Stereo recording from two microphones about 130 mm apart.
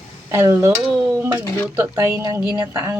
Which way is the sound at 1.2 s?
15° right (ahead or behind).